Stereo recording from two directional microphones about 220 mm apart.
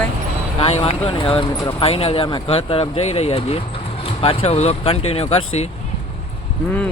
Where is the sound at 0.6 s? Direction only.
25° left (ahead or behind).